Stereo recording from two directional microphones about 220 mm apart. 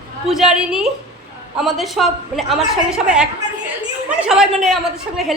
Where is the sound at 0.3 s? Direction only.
Centre (ahead or behind).